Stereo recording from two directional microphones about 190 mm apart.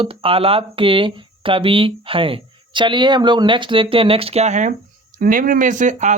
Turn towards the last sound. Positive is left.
turn(degrees=-40)  # may be behind; listen again after turning